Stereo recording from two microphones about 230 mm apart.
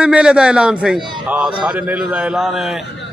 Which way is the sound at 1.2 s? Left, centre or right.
Centre.